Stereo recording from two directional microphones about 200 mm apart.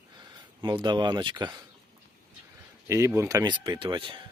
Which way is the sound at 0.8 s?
20° right (ahead or behind).